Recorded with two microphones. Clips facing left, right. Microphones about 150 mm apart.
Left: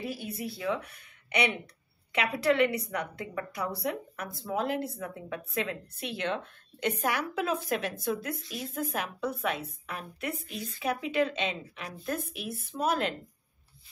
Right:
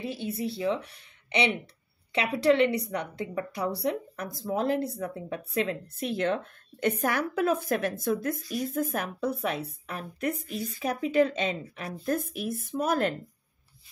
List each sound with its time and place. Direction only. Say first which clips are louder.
0.0 s a woman's voice: right 4 dB; 25° right (ahead or behind); by 13.1 s 45° right (ahead or behind)